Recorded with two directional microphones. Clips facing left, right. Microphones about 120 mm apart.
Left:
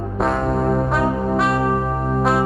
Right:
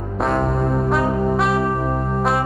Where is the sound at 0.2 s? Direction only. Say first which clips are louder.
Even; centre (ahead or behind).